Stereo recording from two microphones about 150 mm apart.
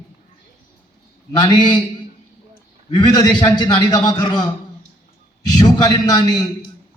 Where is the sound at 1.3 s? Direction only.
30° left (ahead or behind).